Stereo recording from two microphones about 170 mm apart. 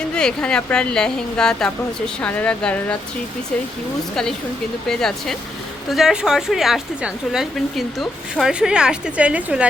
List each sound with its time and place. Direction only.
0.1 s a woman's voice: 5° left (ahead or behind)
4.1 s a woman's voice: 5° left (ahead or behind)